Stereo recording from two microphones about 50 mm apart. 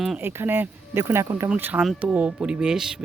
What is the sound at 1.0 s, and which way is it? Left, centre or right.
Speech, right.